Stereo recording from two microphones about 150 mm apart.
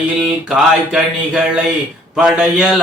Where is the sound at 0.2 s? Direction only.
5° right (ahead or behind).